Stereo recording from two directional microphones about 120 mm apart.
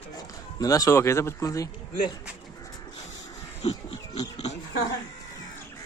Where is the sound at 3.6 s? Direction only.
55° left (ahead or behind).